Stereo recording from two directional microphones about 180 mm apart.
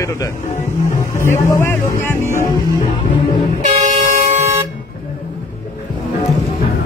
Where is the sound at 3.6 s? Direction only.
40° right (ahead or behind).